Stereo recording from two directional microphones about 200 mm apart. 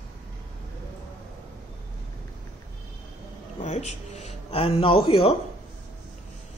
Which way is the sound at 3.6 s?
35° left (ahead or behind).